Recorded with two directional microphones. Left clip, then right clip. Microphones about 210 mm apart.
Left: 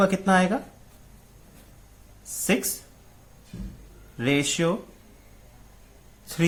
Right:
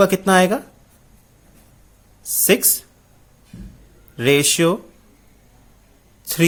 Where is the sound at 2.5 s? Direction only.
50° right (ahead or behind).